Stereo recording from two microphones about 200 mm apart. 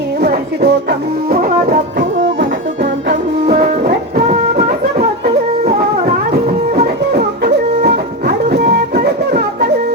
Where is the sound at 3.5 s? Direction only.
40° right (ahead or behind).